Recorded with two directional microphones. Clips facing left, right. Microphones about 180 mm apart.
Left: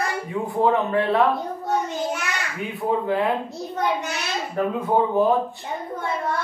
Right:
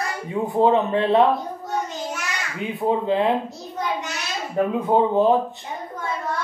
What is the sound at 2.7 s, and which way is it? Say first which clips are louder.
Speech: right 2 dB; 20° right (ahead or behind).